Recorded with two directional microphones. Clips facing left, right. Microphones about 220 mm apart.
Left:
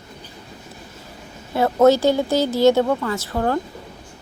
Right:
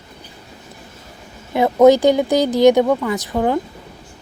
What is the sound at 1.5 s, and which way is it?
A woman's voice, 15° right (ahead or behind).